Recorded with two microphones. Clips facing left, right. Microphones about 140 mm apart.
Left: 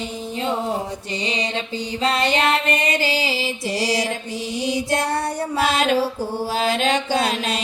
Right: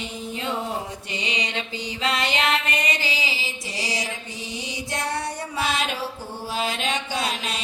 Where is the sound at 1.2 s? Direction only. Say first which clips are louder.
Left 4 dB; 35° left (ahead or behind).